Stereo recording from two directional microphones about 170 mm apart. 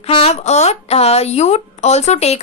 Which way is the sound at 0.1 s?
35° left (ahead or behind).